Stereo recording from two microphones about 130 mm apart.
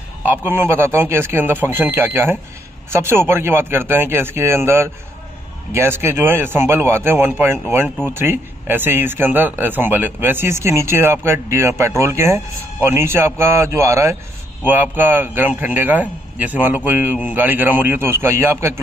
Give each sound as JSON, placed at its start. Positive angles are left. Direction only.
{"t": 0.2, "sound": "a man's voice", "side_deg": -15}